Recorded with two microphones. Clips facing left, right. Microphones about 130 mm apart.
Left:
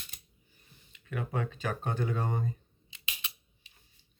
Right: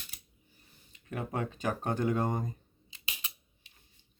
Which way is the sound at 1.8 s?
45° right (ahead or behind).